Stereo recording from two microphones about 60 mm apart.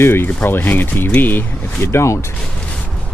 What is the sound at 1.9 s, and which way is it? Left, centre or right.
Speech, left.